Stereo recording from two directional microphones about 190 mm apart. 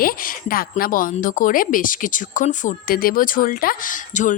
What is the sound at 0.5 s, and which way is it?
A woman's voice, 50° left (ahead or behind).